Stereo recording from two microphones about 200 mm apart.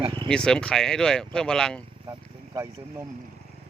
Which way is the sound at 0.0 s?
25° right (ahead or behind).